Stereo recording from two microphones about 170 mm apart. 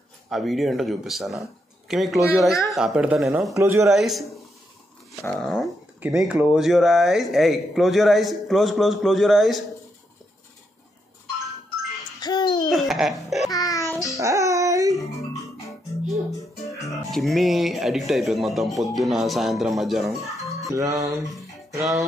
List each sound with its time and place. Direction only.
0.3 s speech: centre (ahead or behind); by 3.9 s 15° right (ahead or behind)
3.9 s speech: centre (ahead or behind)
5.4 s speech: centre (ahead or behind)
5.9 s speech: 10° right (ahead or behind)
12.2 s a sound: 25° left (ahead or behind)
12.6 s laughter: centre (ahead or behind)
13.5 s music: 20° left (ahead or behind)
14.1 s music: 20° right (ahead or behind)
16.3 s music: 20° left (ahead or behind)
17.1 s speech: centre (ahead or behind)
20.3 s music: centre (ahead or behind)
20.7 s music: 20° right (ahead or behind)